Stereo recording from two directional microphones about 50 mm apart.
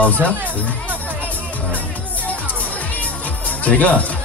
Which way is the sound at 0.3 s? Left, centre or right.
Left.